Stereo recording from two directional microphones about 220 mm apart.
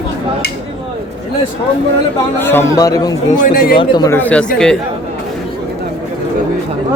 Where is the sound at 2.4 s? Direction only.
10° left (ahead or behind).